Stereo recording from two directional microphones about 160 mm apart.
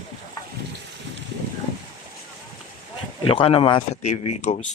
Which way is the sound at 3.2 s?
35° left (ahead or behind).